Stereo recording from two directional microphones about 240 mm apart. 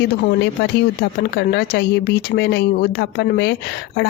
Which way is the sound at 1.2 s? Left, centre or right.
Left.